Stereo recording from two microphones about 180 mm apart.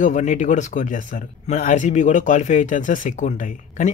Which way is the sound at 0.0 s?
45° left (ahead or behind).